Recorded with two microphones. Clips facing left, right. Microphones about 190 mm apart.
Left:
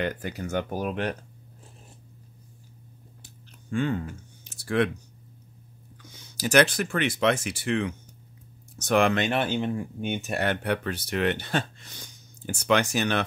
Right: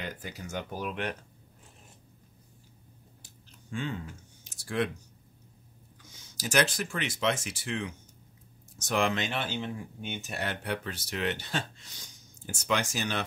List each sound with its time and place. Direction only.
0.0 s speech: 60° left (ahead or behind); by 1.1 s 40° left (ahead or behind)
3.7 s speech: 55° left (ahead or behind)
6.1 s speech: 65° left (ahead or behind)